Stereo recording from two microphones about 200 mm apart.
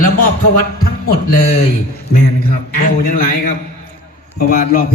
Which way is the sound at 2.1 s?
45° left (ahead or behind).